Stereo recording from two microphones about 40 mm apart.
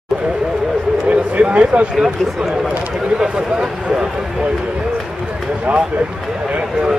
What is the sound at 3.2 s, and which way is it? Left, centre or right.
Speech, right.